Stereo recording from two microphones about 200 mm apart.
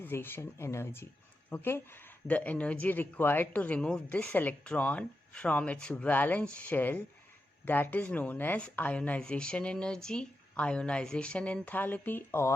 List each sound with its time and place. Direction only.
0.0 s speech: 10° left (ahead or behind)